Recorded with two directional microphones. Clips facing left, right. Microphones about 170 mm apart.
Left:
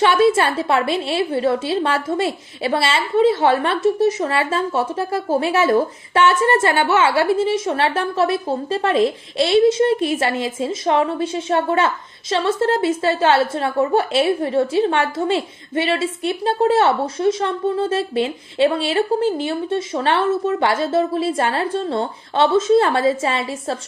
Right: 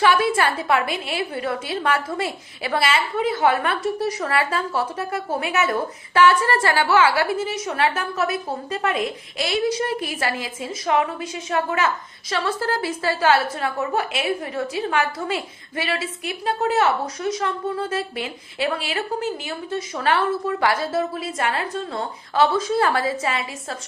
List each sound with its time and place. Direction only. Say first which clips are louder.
0.0 s a woman's voice: left 4 dB; 25° left (ahead or behind)